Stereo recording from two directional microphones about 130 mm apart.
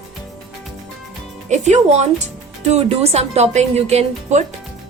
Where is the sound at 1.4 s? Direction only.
65° right (ahead or behind).